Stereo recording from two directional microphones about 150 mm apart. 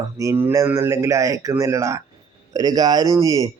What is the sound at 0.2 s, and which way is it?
Speech, 15° right (ahead or behind).